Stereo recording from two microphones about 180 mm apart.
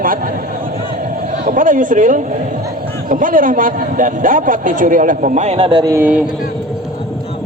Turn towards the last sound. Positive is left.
turn(degrees=-10)  # may be behind; listen again after turning